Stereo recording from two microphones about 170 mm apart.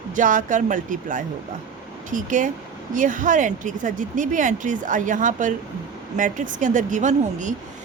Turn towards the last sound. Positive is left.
turn(degrees=-45)  # may be behind; listen again after turning